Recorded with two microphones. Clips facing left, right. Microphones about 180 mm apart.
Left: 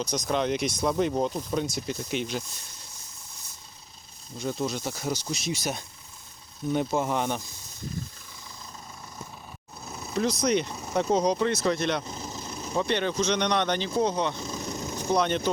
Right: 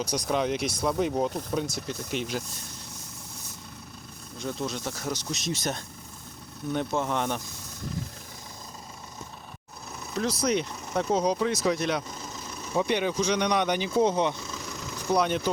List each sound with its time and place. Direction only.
0.0 s speech: 5° right (ahead or behind)
4.4 s speech: centre (ahead or behind)
9.9 s speech: 5° left (ahead or behind)
12.0 s vehicle: 5° left (ahead or behind)
12.3 s vehicle: 30° left (ahead or behind)
12.7 s speech: 10° right (ahead or behind)
14.0 s speech: 20° right (ahead or behind)
14.8 s vehicle: 40° left (ahead or behind)
15.1 s speech: 5° right (ahead or behind)